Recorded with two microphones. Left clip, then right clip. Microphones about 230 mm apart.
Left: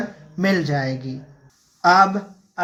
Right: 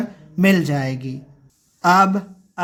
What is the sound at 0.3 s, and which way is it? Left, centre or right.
Speech, right.